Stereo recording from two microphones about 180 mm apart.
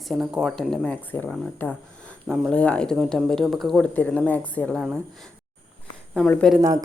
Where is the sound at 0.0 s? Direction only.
Centre (ahead or behind).